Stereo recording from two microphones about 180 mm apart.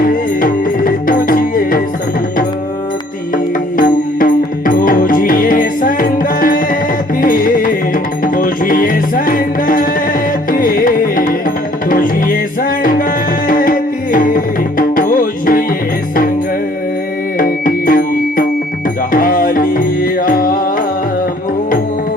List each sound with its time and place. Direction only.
0.0 s music: 50° left (ahead or behind)
3.3 s music: 50° left (ahead or behind)
17.3 s music: 55° left (ahead or behind)